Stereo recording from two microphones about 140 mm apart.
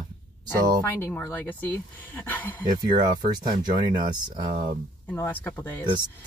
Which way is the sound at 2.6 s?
30° right (ahead or behind).